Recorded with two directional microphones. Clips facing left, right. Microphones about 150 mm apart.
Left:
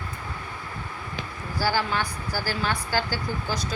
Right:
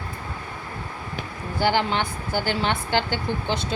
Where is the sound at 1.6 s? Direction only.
20° right (ahead or behind).